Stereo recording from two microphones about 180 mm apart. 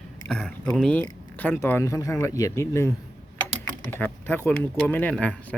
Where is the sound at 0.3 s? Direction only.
5° left (ahead or behind).